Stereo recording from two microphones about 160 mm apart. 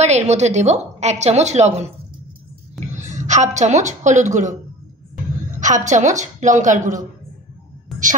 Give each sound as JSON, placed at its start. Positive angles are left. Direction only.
{"t": 0.0, "sound": "a woman's voice", "side_deg": -45}
{"t": 3.0, "sound": "a woman's voice", "side_deg": -50}
{"t": 5.6, "sound": "a woman's voice", "side_deg": -50}